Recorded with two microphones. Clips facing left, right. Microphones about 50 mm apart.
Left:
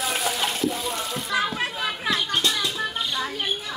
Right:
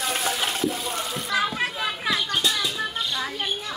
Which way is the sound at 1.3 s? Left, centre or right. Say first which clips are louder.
Even; centre.